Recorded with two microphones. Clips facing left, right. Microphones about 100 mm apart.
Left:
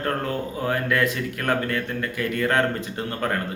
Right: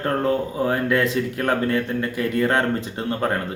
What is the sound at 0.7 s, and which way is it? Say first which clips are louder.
Speech: right 1 dB; 25° right (ahead or behind).